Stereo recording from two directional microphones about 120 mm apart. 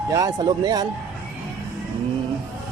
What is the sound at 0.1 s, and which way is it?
Speech, 30° right (ahead or behind).